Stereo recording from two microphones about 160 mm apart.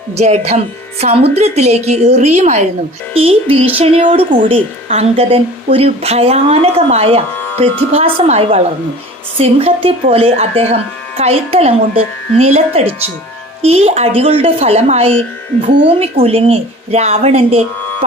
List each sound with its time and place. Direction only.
0.2 s a woman's voice: 45° right (ahead or behind)
7.3 s music: 10° left (ahead or behind)
8.3 s a woman's voice: 40° right (ahead or behind)